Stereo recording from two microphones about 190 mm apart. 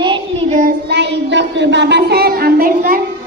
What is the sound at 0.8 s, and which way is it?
Speech, 65° right (ahead or behind).